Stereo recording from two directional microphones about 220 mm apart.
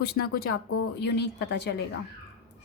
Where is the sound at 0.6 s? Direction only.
80° left.